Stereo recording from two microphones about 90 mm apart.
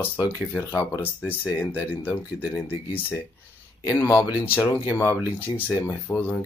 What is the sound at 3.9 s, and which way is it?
Speech, 30° left (ahead or behind).